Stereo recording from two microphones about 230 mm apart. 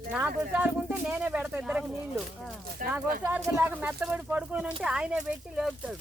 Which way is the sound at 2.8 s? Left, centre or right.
Right.